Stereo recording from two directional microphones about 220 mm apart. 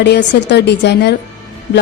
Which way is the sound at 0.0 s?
50° left (ahead or behind).